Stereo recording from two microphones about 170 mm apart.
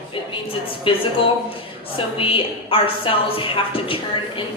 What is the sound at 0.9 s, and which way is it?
Speech, 30° left (ahead or behind).